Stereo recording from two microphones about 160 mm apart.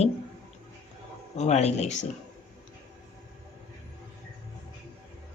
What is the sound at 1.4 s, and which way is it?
Speech, 45° left (ahead or behind).